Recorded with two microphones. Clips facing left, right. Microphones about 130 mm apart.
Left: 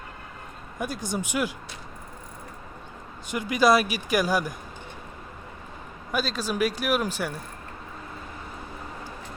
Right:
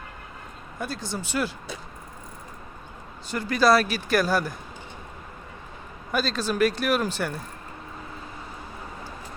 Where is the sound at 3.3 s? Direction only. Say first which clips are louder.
Even; 15° left (ahead or behind).